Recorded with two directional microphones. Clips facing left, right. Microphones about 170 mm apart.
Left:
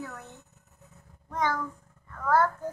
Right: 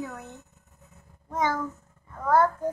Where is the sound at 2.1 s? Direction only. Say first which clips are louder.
Right 3 dB; 20° right (ahead or behind).